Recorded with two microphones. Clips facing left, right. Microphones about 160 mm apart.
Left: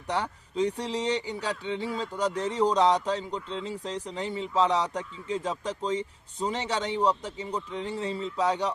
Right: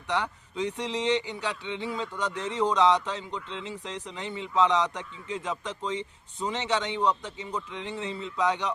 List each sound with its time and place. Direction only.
0.1 s speech: 35° left (ahead or behind)